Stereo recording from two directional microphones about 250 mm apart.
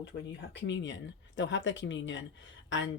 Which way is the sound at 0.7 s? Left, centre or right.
Left.